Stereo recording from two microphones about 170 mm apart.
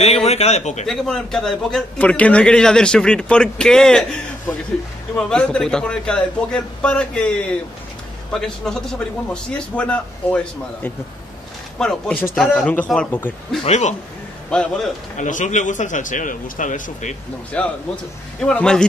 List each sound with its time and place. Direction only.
0.0 s a man's voice: 35° left (ahead or behind)
0.8 s a man's voice: centre (ahead or behind)
5.3 s a man's voice: 5° left (ahead or behind)
13.7 s a man's voice: 45° left (ahead or behind)
14.5 s a man's voice: 5° left (ahead or behind)
15.1 s a man's voice: 45° left (ahead or behind)
17.5 s a man's voice: 5° left (ahead or behind)